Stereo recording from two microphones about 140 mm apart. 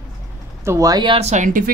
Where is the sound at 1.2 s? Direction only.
60° right (ahead or behind).